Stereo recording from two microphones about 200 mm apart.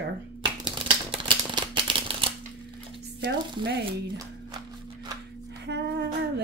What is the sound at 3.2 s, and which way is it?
Frying, 55° right (ahead or behind).